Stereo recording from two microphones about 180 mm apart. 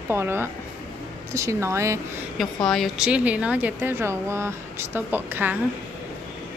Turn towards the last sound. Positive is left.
turn(degrees=-10)  # may be behind; listen again after turning